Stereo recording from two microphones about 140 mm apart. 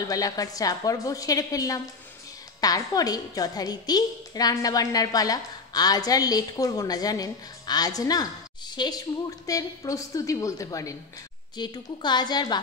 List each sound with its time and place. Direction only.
0.1 s a woman's voice: 25° left (ahead or behind)